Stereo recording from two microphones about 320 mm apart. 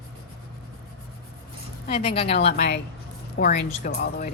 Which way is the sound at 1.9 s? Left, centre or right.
Centre.